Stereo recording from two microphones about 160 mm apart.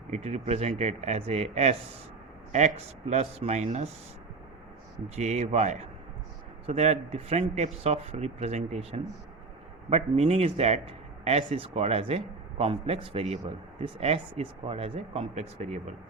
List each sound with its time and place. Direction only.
0.1 s speech: 45° right (ahead or behind)
5.0 s a man's voice: 45° right (ahead or behind)